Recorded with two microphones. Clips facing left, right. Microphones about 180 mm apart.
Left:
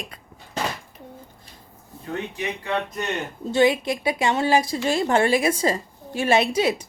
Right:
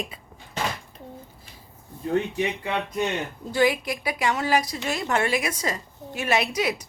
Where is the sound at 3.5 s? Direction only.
25° left (ahead or behind).